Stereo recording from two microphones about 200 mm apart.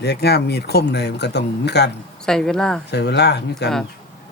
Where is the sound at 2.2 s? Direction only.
5° left (ahead or behind).